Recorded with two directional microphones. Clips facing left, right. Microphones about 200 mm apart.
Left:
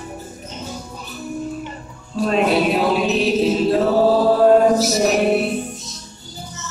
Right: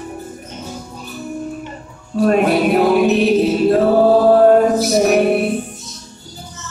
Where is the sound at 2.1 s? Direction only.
55° right (ahead or behind).